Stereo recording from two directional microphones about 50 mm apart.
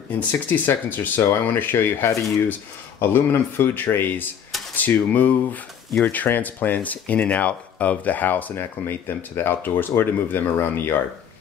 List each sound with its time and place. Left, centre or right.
0.3 s speech: left
2.0 s speech: left
3.0 s speech: left
8.5 s speech: left